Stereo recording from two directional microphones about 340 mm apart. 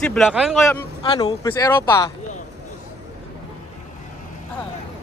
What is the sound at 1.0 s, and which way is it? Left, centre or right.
Speech, centre.